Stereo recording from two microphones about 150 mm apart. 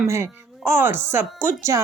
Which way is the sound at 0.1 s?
20° right (ahead or behind).